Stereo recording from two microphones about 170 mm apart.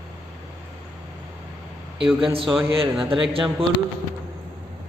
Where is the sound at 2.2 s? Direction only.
30° right (ahead or behind).